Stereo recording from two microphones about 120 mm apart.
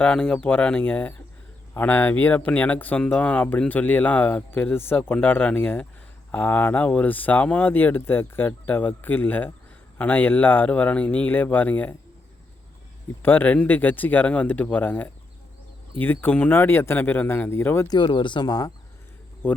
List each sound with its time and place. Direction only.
0.0 s speech: 10° left (ahead or behind)
13.2 s speech: 15° left (ahead or behind)
17.8 s speech: 40° left (ahead or behind)